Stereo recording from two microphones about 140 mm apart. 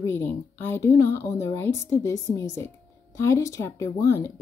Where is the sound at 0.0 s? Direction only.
15° left (ahead or behind).